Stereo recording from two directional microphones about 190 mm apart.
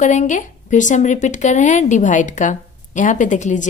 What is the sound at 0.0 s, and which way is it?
A woman's voice, 40° left (ahead or behind).